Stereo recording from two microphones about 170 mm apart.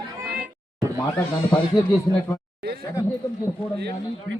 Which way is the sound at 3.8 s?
75° right (ahead or behind).